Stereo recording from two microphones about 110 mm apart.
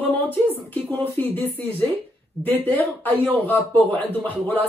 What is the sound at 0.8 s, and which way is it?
Speech, 15° left (ahead or behind).